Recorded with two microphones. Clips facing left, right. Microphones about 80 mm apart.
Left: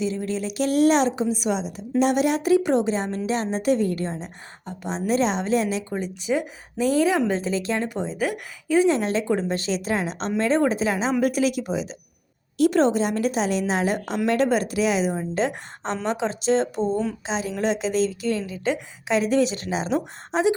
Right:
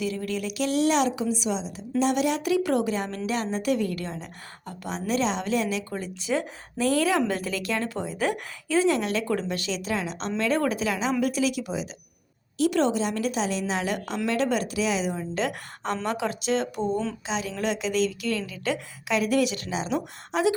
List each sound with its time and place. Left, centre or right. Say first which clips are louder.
0.0 s a woman's voice: left 3 dB; left
1.4 s a woman's voice: left 4 dB; left
5.9 s speech: left 3 dB; centre
9.0 s a woman's voice: left 3 dB; left